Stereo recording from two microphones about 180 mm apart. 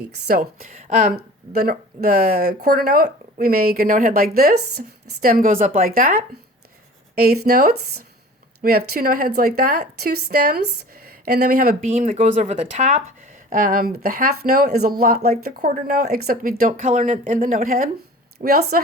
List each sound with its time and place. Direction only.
0.3 s speech: 55° right (ahead or behind)
0.8 s speech: 45° right (ahead or behind)
12.0 s a woman's voice: 35° right (ahead or behind); by 18.6 s 55° right (ahead or behind)